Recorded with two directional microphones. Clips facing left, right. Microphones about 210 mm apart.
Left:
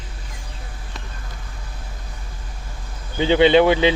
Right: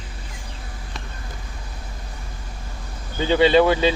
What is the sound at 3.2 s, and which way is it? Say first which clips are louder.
Speech: left 2 dB; 20° left (ahead or behind).